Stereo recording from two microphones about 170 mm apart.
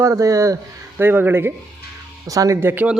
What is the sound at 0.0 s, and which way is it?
A man's voice, 20° right (ahead or behind).